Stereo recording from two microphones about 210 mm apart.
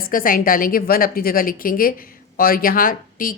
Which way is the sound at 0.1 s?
40° left (ahead or behind).